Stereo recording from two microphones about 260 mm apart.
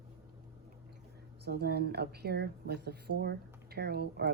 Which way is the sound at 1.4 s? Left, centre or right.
Right.